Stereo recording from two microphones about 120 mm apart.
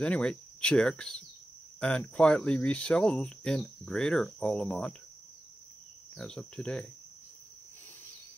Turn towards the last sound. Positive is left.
turn(degrees=5)  # may be behind; listen again after turning